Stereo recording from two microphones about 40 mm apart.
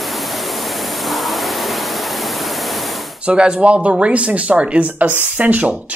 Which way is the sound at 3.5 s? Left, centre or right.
Right.